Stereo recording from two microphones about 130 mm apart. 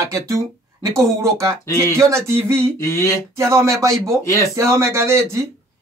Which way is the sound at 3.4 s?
20° right (ahead or behind).